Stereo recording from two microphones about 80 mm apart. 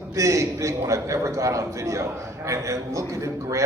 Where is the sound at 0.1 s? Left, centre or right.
Right.